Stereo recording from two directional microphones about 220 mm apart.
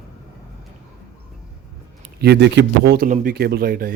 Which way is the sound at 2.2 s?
50° right (ahead or behind).